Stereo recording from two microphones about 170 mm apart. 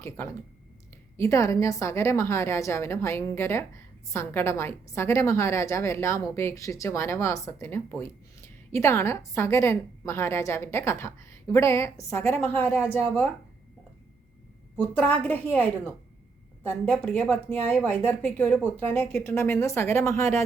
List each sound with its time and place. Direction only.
1.1 s a woman's voice: 15° left (ahead or behind)
14.8 s a woman's voice: 10° left (ahead or behind)
16.6 s a woman's voice: 10° left (ahead or behind)